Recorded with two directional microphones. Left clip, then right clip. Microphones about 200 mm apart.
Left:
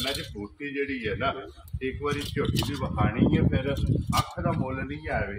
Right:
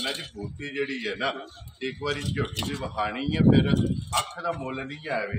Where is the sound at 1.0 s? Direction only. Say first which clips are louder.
Even; 70° right (ahead or behind).